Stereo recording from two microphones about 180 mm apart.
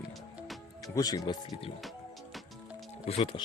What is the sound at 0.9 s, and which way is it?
Speech, 20° left (ahead or behind).